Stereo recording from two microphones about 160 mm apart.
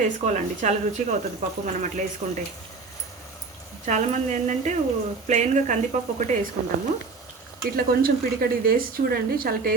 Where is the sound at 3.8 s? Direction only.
50° right (ahead or behind).